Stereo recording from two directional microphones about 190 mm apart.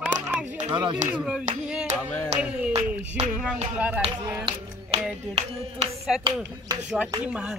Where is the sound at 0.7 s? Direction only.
25° right (ahead or behind).